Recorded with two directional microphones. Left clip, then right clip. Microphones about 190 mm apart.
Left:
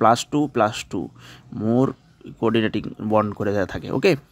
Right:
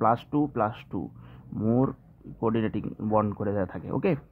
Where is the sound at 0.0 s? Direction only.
40° left (ahead or behind).